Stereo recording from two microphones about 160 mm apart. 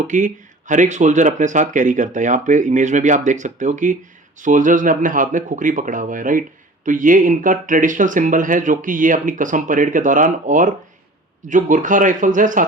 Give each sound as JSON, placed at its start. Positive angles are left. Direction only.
{"t": 0.1, "sound": "speech", "side_deg": -55}